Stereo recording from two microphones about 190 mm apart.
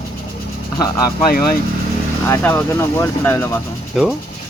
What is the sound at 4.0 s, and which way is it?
Ratchet, centre (ahead or behind).